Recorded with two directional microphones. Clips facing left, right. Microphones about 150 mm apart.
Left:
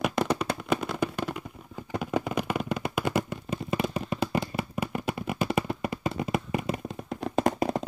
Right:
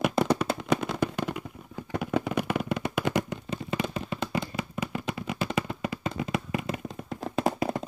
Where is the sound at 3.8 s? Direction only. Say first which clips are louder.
Left 2 dB; 40° left (ahead or behind).